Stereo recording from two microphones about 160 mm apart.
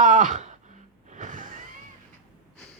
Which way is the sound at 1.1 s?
55° right (ahead or behind).